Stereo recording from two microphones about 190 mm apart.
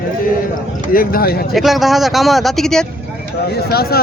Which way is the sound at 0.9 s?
50° left (ahead or behind).